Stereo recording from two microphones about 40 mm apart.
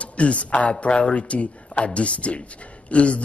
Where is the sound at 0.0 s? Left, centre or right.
Left.